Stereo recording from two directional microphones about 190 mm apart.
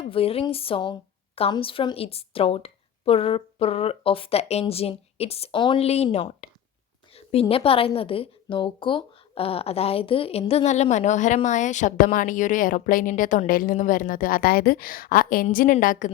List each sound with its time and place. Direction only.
0.0 s a woman's voice: 30° left (ahead or behind)